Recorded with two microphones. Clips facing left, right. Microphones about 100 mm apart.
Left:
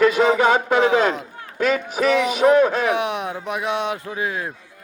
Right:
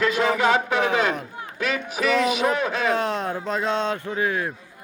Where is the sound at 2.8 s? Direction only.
15° left (ahead or behind).